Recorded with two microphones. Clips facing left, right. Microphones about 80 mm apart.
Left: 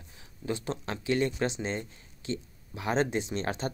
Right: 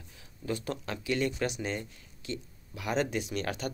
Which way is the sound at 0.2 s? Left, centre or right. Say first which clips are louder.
Left 1 dB; left.